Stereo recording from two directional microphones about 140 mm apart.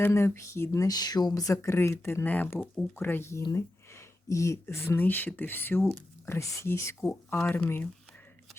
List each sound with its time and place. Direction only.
0.0 s speech: 20° left (ahead or behind)
7.1 s speech: 10° left (ahead or behind)